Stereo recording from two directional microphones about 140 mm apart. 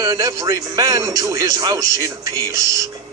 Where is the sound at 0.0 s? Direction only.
20° right (ahead or behind).